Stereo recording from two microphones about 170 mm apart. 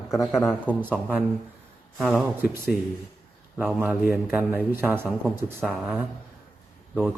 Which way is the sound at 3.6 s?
10° right (ahead or behind).